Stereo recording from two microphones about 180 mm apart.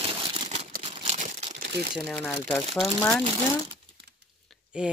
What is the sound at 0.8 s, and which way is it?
Crumpling, 35° right (ahead or behind).